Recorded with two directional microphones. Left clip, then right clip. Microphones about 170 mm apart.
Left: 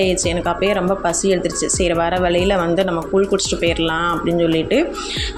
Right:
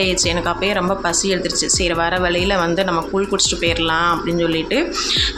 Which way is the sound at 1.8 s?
15° left (ahead or behind).